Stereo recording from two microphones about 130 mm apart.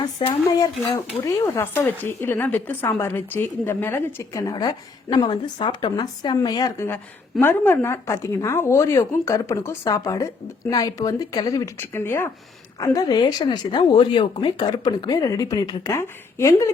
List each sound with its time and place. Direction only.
0.2 s speech: 40° left (ahead or behind)
0.9 s speech: 20° left (ahead or behind)